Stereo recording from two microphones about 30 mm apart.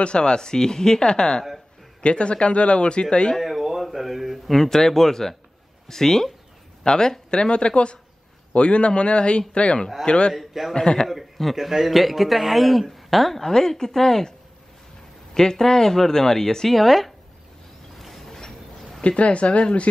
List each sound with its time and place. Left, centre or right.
0.0 s a man's voice: left
3.3 s a sound: centre
4.6 s a man's voice: centre; by 10.3 s left
10.3 s a man's voice: centre
10.7 s speech: left
11.5 s speech: centre
13.4 s speech: centre
15.3 s speech: centre
17.9 s a sound: centre
19.0 s speech: left